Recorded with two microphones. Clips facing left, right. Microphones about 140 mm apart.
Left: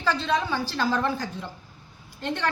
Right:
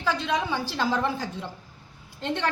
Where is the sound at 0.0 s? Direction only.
15° right (ahead or behind).